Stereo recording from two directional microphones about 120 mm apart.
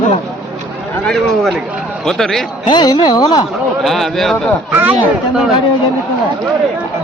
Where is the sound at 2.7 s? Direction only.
40° left (ahead or behind).